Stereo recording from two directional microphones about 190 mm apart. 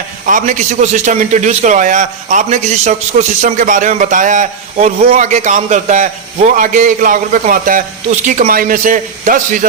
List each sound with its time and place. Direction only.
0.3 s a man's voice: 40° right (ahead or behind)